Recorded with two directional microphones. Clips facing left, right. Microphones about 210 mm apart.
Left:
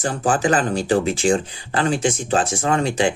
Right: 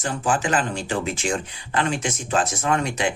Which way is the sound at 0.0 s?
35° left (ahead or behind).